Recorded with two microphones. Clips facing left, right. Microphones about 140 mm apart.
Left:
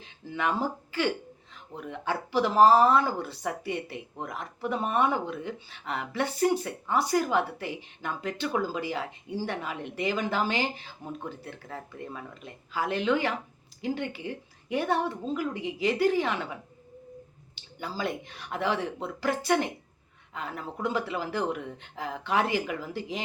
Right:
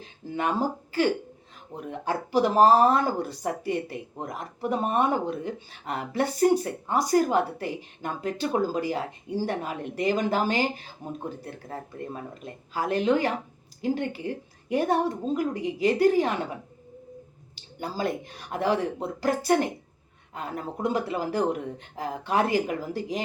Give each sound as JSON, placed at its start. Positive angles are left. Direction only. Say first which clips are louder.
{"t": 0.0, "sound": "speech", "louder": "right 2 dB", "side_deg": -40}